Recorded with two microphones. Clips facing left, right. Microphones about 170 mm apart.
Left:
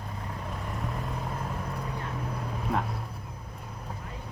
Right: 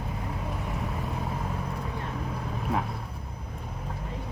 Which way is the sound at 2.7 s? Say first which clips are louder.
Even; centre (ahead or behind).